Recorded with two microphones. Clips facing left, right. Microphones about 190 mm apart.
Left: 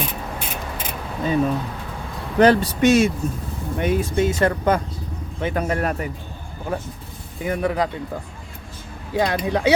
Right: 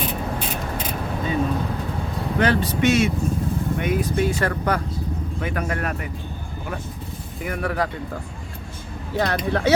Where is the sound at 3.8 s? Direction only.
25° left (ahead or behind).